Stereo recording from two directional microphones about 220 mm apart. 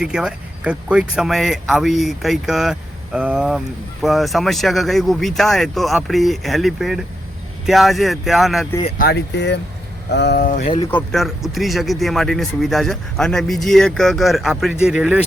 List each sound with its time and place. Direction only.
0.0 s speech: 5° right (ahead or behind)
9.0 s speech: 50° left (ahead or behind)
10.9 s speech: centre (ahead or behind)